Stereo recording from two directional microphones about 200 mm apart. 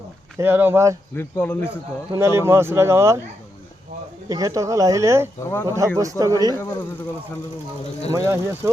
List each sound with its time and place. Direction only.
0.3 s speech: 10° right (ahead or behind)
1.1 s speech: 10° left (ahead or behind)
2.1 s speech: 15° right (ahead or behind)
4.3 s speech: 15° right (ahead or behind)
5.4 s speech: 15° left (ahead or behind)
5.6 s speech: 15° right (ahead or behind)
8.1 s speech: 15° right (ahead or behind)